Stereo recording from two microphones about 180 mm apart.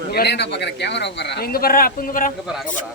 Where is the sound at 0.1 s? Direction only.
65° left (ahead or behind).